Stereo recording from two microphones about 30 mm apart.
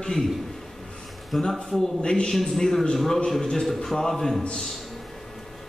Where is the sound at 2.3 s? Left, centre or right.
Centre.